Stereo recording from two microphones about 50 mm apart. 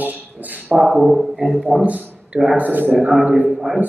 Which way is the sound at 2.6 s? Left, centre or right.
Right.